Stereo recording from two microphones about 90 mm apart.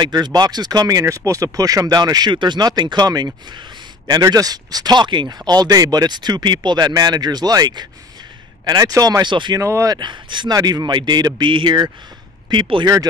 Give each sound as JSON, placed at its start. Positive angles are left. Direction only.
{"t": 0.0, "sound": "speech", "side_deg": -50}
{"t": 9.2, "sound": "speech", "side_deg": -55}
{"t": 9.6, "sound": "speech", "side_deg": -35}
{"t": 9.9, "sound": "a man's voice", "side_deg": -60}